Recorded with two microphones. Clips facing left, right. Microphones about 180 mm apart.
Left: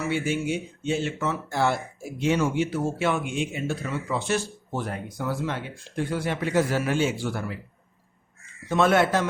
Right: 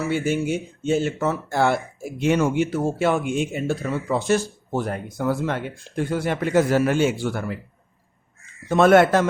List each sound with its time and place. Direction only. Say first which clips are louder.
0.1 s speech: right 3 dB; 45° right (ahead or behind)
8.7 s speech: right 6 dB; 50° right (ahead or behind)